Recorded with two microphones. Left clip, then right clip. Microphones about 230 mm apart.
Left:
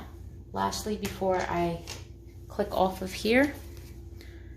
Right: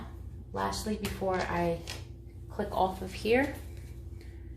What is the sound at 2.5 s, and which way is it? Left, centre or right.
Speech, left.